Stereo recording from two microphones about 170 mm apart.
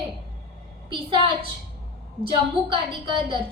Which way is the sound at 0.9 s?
30° right (ahead or behind).